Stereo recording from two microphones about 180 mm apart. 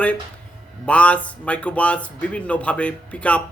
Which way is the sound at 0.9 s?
5° left (ahead or behind).